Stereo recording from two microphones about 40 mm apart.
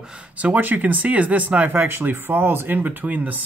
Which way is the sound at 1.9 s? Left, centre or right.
Right.